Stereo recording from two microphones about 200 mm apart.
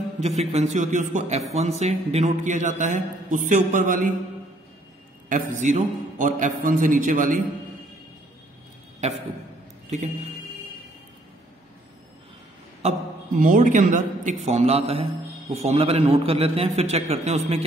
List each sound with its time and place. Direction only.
0.2 s a man's voice: 30° right (ahead or behind)
5.3 s a man's voice: 40° right (ahead or behind)
9.8 s speech: 35° right (ahead or behind)
12.8 s a man's voice: 30° right (ahead or behind)